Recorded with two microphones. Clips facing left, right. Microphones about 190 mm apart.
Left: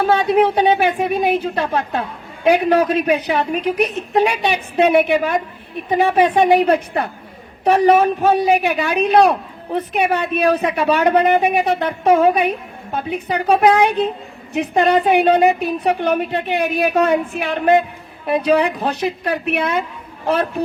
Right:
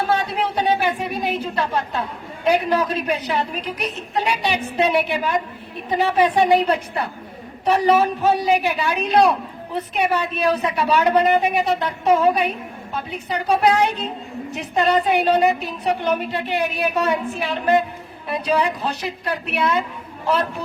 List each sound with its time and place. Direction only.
0.1 s a woman's voice: 60° left (ahead or behind)